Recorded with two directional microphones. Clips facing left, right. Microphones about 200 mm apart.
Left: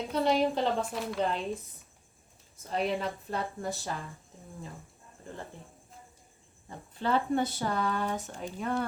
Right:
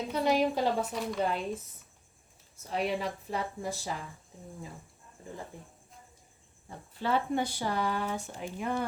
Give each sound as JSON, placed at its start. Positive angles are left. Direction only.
{"t": 0.1, "sound": "speech", "side_deg": -10}
{"t": 2.6, "sound": "speech", "side_deg": -5}
{"t": 6.7, "sound": "speech", "side_deg": -5}